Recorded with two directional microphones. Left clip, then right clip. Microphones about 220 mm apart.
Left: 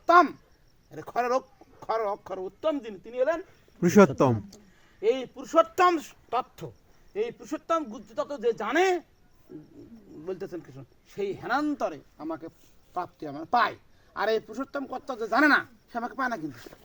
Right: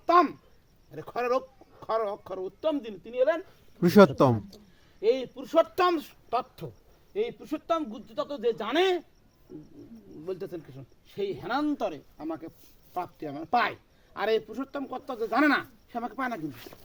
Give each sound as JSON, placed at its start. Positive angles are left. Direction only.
{"t": 0.0, "sound": "a sound", "side_deg": 15}
{"t": 0.9, "sound": "a man's voice", "side_deg": 15}
{"t": 10.4, "sound": "speech", "side_deg": 0}